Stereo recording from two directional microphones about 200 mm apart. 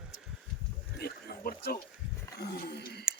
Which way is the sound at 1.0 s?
50° left (ahead or behind).